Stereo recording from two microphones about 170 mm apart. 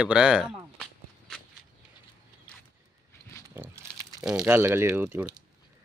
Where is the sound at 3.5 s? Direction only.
15° right (ahead or behind).